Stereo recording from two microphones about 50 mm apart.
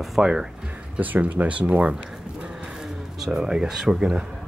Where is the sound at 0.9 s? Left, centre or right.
Right.